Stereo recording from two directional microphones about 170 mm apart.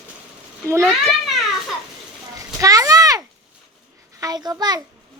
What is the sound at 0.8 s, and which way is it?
Speech, centre (ahead or behind).